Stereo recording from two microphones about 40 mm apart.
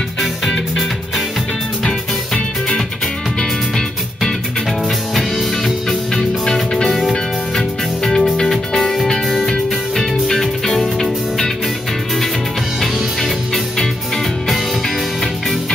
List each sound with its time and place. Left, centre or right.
1.9 s music: left
5.9 s music: centre